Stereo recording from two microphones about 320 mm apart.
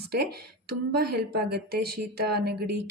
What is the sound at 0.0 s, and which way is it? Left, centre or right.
A woman's voice, right.